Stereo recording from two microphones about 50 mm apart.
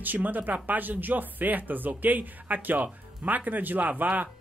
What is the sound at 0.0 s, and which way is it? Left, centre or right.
Speech, right.